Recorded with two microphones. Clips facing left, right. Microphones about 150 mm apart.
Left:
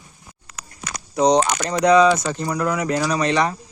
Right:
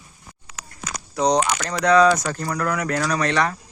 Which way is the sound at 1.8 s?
10° left (ahead or behind).